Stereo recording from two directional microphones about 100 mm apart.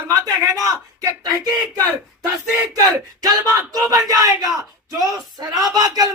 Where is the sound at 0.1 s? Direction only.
35° right (ahead or behind).